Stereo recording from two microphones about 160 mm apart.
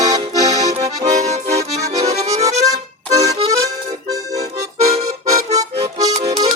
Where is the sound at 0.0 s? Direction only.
20° right (ahead or behind).